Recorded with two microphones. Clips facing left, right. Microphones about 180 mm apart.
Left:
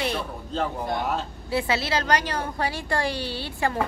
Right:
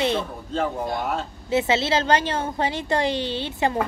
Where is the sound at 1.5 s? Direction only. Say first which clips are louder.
Right 4 dB; 20° right (ahead or behind).